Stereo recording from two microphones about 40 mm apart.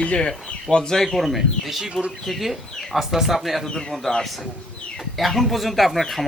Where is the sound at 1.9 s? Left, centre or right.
Right.